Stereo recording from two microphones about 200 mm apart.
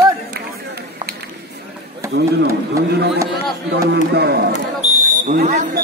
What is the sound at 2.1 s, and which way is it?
A man's voice, 55° right (ahead or behind).